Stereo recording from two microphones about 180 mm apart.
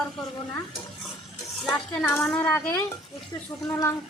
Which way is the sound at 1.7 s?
5° left (ahead or behind).